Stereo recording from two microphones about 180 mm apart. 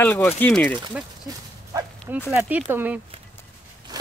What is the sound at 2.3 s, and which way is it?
Speech, 10° right (ahead or behind).